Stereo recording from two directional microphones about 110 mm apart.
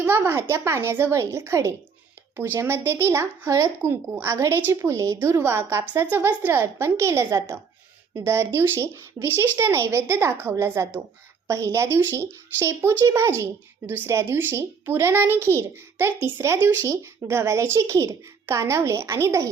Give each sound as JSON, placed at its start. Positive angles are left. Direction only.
{"t": 0.0, "sound": "speech", "side_deg": -20}